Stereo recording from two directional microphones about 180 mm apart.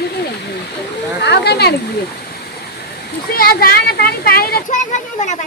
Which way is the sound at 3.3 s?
55° left (ahead or behind).